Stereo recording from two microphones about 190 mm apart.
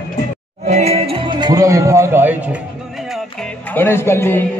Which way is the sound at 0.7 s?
35° right (ahead or behind).